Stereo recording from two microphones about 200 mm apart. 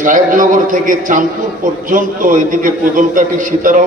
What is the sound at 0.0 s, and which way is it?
A man's voice, 40° right (ahead or behind).